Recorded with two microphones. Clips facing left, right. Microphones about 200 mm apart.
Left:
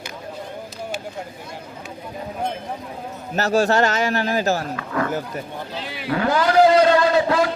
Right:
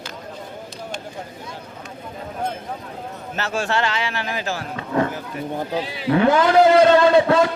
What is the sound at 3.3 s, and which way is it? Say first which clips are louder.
A man's voice: left 6 dB; 40° left (ahead or behind).